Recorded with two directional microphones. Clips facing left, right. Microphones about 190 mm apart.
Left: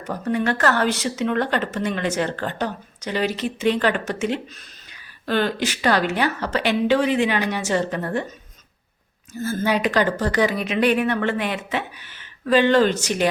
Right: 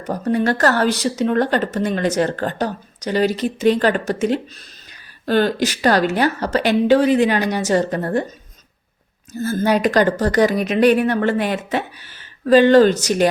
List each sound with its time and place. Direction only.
0.0 s speech: 40° right (ahead or behind)
9.4 s speech: 40° right (ahead or behind)